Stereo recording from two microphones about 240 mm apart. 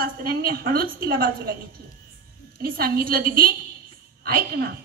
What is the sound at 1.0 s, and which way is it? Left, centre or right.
Speech, right.